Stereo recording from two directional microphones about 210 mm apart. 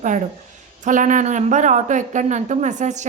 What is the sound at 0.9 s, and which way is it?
Speech, 35° right (ahead or behind).